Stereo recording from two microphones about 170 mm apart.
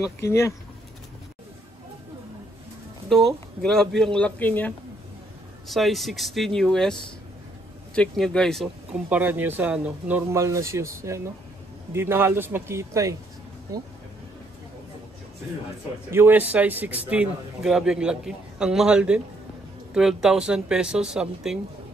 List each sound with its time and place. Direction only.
0.2 s speech: 15° left (ahead or behind)
3.1 s a man's voice: centre (ahead or behind)
9.1 s speech: 10° right (ahead or behind)
16.1 s a man's voice: 10° right (ahead or behind)